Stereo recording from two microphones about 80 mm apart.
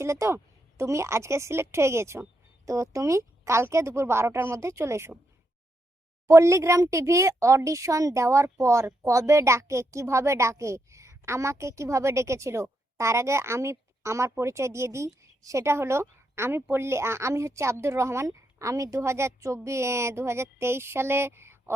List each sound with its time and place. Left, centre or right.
0.0 s a woman's voice: right
6.2 s a woman's voice: right